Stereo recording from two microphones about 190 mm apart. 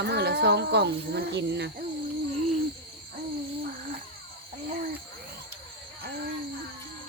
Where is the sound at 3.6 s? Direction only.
50° right (ahead or behind).